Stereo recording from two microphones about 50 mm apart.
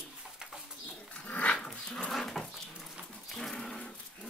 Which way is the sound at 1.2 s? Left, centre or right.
Left.